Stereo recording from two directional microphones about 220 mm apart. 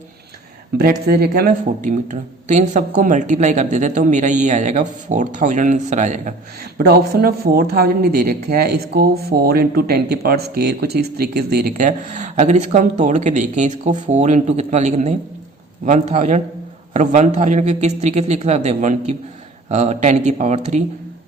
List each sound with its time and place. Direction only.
0.8 s speech: 45° right (ahead or behind)
6.7 s speech: 45° right (ahead or behind)